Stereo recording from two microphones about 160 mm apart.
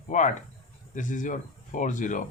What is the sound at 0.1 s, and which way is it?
Speech, 50° left (ahead or behind).